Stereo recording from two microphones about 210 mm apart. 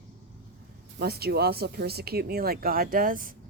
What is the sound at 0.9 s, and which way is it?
Speech, 50° right (ahead or behind).